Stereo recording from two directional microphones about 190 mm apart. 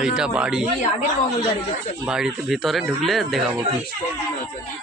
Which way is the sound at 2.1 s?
5° right (ahead or behind).